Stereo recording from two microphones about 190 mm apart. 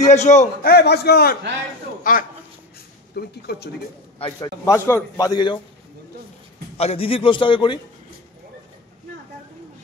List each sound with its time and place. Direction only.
0.0 s a man's voice: 35° left (ahead or behind)
0.7 s a man's voice: 55° left (ahead or behind)
3.2 s a man's voice: 55° left (ahead or behind)
4.4 s a man's voice: 15° left (ahead or behind)
6.8 s a man's voice: 30° left (ahead or behind)